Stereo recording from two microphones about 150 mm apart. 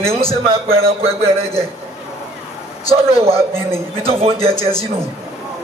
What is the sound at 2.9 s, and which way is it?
A man's voice, 40° right (ahead or behind).